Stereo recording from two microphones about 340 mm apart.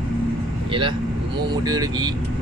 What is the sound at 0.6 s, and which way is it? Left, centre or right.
Speech, centre.